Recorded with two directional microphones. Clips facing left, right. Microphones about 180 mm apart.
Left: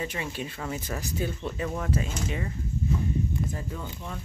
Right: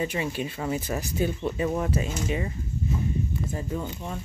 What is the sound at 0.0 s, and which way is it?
Speech, 20° right (ahead or behind).